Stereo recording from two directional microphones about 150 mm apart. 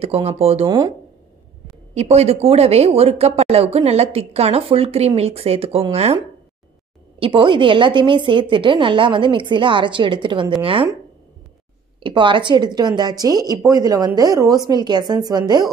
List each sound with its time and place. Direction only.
0.0 s speech: 40° right (ahead or behind)
0.7 s a woman's voice: 25° right (ahead or behind)
2.0 s speech: 45° right (ahead or behind)
7.2 s a woman's voice: 35° right (ahead or behind)
12.0 s a woman's voice: 35° right (ahead or behind)